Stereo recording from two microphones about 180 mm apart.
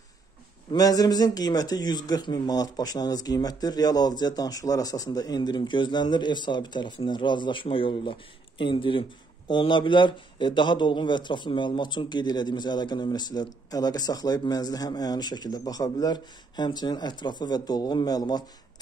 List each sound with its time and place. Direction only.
0.7 s a man's voice: 20° left (ahead or behind)